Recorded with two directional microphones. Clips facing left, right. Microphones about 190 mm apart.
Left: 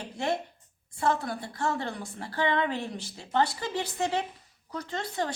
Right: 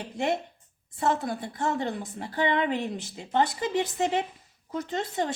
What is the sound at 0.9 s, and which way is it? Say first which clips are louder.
Speech: right 1 dB; 20° right (ahead or behind).